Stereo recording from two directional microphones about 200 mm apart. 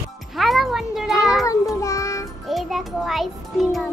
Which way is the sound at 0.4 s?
Centre (ahead or behind).